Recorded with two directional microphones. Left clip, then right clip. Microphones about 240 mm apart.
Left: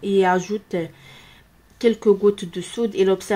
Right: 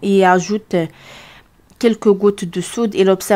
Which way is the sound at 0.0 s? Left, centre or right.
Right.